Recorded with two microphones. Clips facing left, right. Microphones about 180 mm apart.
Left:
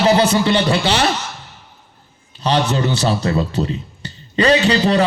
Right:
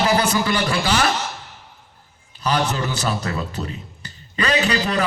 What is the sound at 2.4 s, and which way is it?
A man's voice, 25° left (ahead or behind).